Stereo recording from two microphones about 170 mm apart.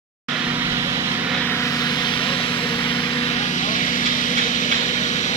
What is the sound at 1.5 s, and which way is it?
Vehicle, 15° left (ahead or behind).